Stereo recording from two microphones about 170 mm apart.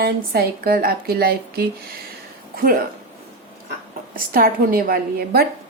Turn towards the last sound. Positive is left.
turn(degrees=-60)  # may be behind; listen again after turning